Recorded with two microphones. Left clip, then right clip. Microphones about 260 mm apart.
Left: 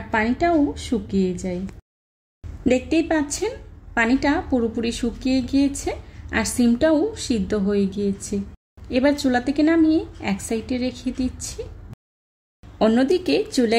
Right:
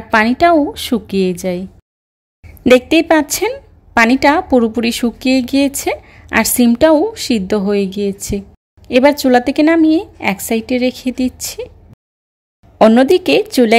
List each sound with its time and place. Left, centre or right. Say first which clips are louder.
0.1 s a woman's voice: right 10 dB; right
2.6 s a woman's voice: right 11 dB; right
12.7 s a woman's voice: right 10 dB; right